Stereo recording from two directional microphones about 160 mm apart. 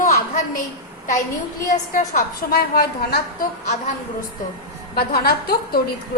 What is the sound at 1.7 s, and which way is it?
Speech, 50° left (ahead or behind).